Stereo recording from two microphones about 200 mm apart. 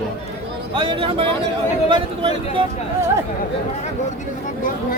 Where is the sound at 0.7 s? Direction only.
25° right (ahead or behind).